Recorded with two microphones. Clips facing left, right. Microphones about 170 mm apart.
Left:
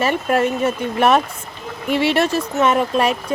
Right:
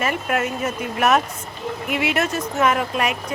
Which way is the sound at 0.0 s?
30° left (ahead or behind).